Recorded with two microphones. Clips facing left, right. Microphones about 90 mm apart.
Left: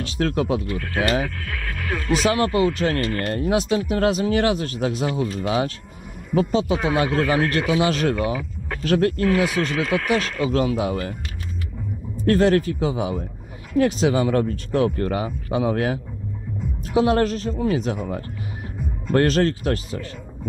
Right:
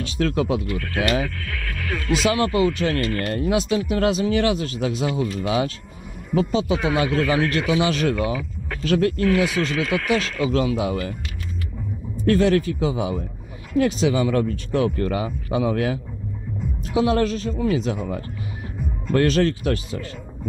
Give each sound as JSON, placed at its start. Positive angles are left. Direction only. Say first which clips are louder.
{"t": 0.0, "sound": "speech", "louder": "even", "side_deg": 40}
{"t": 2.1, "sound": "speech", "louder": "even", "side_deg": 40}
{"t": 12.3, "sound": "a man's voice", "louder": "left 1 dB", "side_deg": 40}
{"t": 19.1, "sound": "speech", "louder": "even", "side_deg": 40}